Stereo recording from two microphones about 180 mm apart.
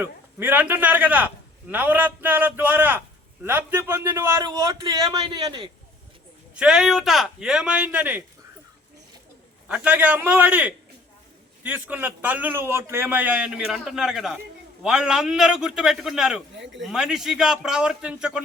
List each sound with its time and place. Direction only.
0.0 s a man's voice: 10° right (ahead or behind)
6.5 s speech: 5° right (ahead or behind)
9.6 s a man's voice: 10° right (ahead or behind)